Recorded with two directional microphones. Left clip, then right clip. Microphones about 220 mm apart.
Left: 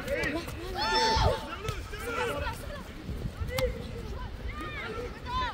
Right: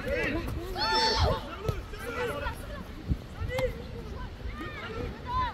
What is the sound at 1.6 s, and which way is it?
Run, 40° left (ahead or behind).